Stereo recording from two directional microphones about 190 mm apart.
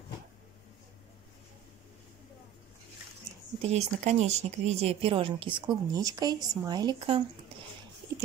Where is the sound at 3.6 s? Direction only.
35° right (ahead or behind).